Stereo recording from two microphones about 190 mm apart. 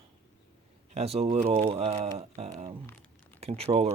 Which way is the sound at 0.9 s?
35° right (ahead or behind).